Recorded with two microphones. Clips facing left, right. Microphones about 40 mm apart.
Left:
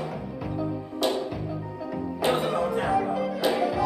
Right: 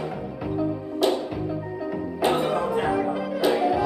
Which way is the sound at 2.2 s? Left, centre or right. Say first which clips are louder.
Right 2 dB; centre.